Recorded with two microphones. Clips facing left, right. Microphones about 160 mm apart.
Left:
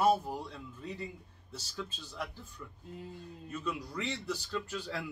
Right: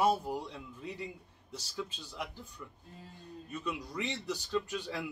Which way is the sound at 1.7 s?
10° right (ahead or behind).